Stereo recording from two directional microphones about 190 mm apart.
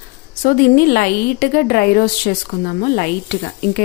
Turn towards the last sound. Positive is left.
turn(degrees=50)  # may be behind; listen again after turning